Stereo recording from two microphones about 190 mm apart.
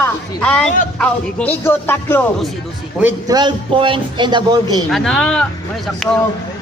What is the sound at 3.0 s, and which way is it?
A man's voice, 20° right (ahead or behind).